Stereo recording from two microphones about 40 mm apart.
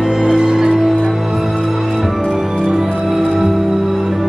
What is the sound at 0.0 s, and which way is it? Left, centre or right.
Music, centre.